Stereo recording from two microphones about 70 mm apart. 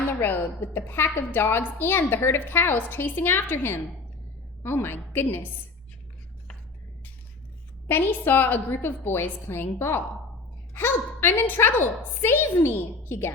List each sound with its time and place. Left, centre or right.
0.2 s a woman's voice: left
7.9 s a woman's voice: left